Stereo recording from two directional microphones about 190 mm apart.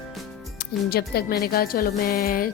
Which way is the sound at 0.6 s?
55° left (ahead or behind).